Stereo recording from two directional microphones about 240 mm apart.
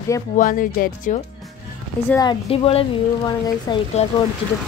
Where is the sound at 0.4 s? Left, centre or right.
Left.